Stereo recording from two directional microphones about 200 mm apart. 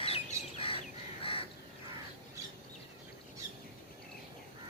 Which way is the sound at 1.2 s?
30° left (ahead or behind).